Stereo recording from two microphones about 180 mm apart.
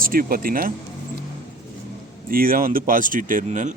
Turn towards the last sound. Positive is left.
turn(degrees=-45)  # may be behind; listen again after turning